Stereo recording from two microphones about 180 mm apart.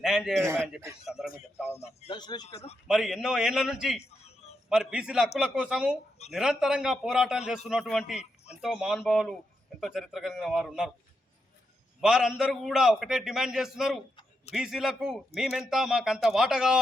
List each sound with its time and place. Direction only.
0.0 s a man's voice: centre (ahead or behind)
1.8 s a man's voice: 35° left (ahead or behind)
2.1 s speech: 25° left (ahead or behind)
2.5 s a man's voice: 35° left (ahead or behind)
2.8 s a man's voice: centre (ahead or behind)
11.9 s a man's voice: centre (ahead or behind)